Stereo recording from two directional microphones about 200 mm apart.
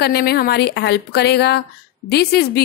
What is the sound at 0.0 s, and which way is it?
A woman's voice, 50° left (ahead or behind).